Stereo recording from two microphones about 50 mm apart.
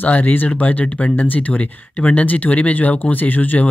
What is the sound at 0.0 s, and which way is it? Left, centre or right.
Speech, left.